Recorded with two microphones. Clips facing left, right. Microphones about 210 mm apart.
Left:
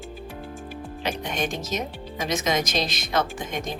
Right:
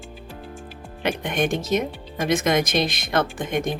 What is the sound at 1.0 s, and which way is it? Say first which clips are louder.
Speech: right 5 dB; 55° right (ahead or behind).